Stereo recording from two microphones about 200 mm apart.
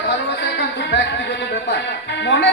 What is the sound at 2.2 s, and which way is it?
Speech, 60° left (ahead or behind).